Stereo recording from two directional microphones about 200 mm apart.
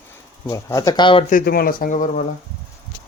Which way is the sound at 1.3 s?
50° left (ahead or behind).